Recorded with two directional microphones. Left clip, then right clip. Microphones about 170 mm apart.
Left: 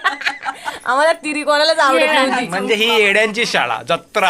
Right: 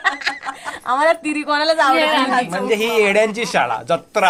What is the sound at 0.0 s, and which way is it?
Snicker, 55° left (ahead or behind).